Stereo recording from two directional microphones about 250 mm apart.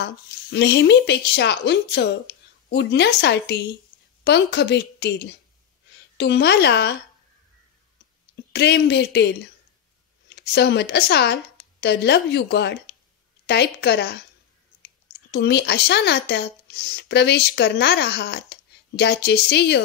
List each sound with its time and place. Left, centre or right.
0.0 s speech: left
8.5 s speech: left
10.3 s speech: left
15.3 s speech: left